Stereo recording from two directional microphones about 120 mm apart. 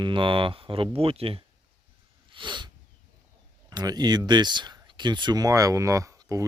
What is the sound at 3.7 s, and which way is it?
Speech, 35° right (ahead or behind).